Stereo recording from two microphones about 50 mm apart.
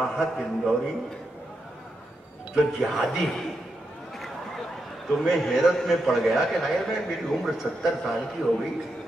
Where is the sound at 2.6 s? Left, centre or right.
Centre.